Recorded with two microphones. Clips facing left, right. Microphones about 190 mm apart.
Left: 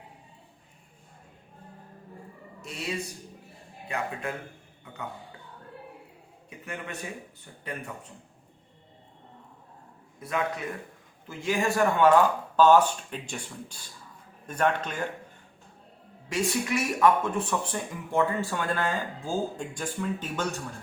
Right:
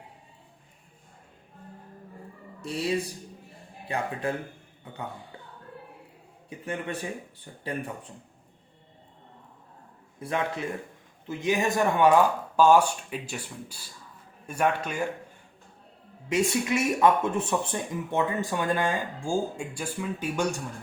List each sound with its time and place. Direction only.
2.6 s a man's voice: 30° right (ahead or behind)
6.7 s a man's voice: 30° right (ahead or behind)
10.2 s a man's voice: 30° right (ahead or behind); by 15.0 s 10° right (ahead or behind)
16.3 s speech: 20° right (ahead or behind)